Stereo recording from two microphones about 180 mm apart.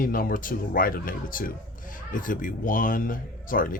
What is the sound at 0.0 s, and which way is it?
Speech, 50° left (ahead or behind).